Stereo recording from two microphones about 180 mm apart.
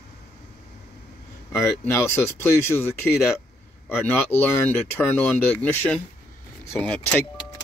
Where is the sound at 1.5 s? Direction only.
15° left (ahead or behind).